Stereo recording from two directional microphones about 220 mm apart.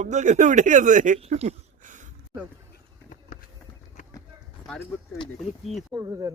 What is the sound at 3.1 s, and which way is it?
Run, 40° left (ahead or behind).